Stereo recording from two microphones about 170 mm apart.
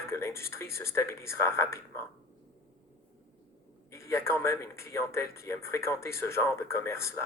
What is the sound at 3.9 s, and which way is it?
Speech, 15° left (ahead or behind).